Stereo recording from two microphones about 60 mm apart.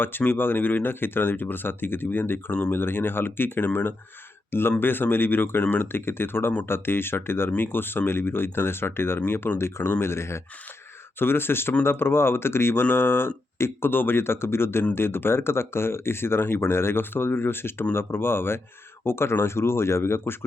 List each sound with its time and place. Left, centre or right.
0.0 s speech: left